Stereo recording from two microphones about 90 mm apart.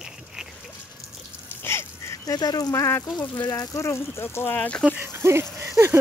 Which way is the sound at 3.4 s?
45° left (ahead or behind).